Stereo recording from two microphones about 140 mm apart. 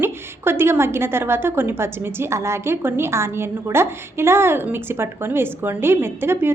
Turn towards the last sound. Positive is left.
turn(degrees=-15)  # may be behind; listen again after turning